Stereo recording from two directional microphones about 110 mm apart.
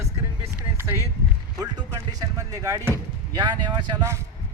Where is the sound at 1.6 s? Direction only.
35° right (ahead or behind).